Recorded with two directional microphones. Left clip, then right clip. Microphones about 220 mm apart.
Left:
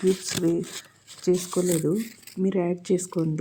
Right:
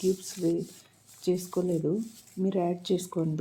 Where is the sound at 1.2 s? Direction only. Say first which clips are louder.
Left 5 dB; 20° left (ahead or behind).